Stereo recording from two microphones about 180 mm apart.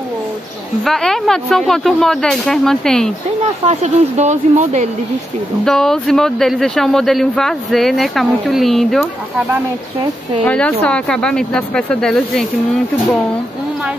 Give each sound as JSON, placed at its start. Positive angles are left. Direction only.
{"t": 0.8, "sound": "speech", "side_deg": 0}
{"t": 3.6, "sound": "speech", "side_deg": -40}
{"t": 5.7, "sound": "speech", "side_deg": 0}
{"t": 10.4, "sound": "speech", "side_deg": 5}